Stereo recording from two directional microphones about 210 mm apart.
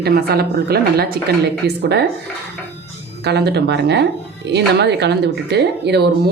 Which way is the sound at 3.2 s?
50° right (ahead or behind).